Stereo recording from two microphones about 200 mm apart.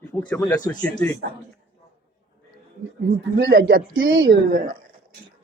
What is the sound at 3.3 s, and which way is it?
Speech, 60° right (ahead or behind).